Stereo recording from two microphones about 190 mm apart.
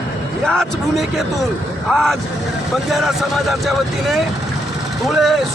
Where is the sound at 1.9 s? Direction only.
Centre (ahead or behind).